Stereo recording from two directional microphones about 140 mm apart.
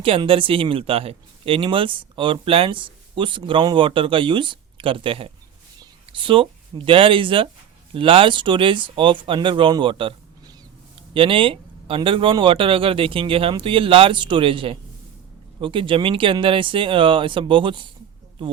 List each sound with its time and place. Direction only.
0.0 s speech: 40° right (ahead or behind)